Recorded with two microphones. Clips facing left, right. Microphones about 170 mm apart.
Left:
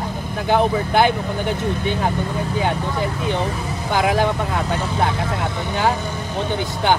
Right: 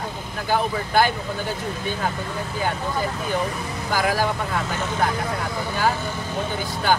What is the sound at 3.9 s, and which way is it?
Speech, 25° left (ahead or behind).